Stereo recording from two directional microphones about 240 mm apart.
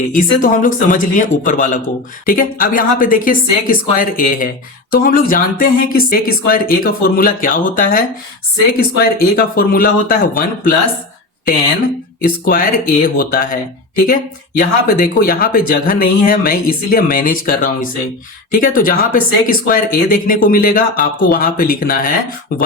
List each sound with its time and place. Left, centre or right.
0.1 s speech: left
12.2 s speech: left